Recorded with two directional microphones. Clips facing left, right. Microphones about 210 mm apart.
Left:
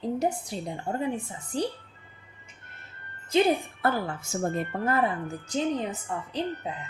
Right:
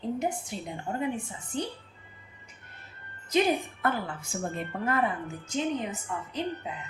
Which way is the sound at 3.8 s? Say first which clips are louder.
Left 3 dB; 40° left (ahead or behind).